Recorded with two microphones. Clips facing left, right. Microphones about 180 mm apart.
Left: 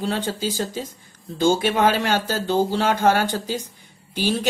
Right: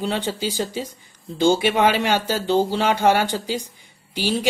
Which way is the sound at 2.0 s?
15° right (ahead or behind).